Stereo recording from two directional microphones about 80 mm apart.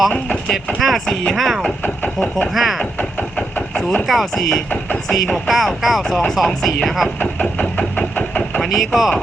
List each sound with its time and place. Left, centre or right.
0.1 s speech: centre
0.8 s speech: centre
1.8 s speech: centre
2.6 s speech: centre
3.0 s engine: centre
4.0 s speech: centre
7.2 s engine: centre
8.6 s speech: centre